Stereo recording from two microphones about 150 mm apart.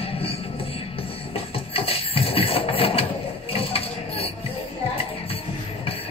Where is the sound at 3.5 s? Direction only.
40° left (ahead or behind).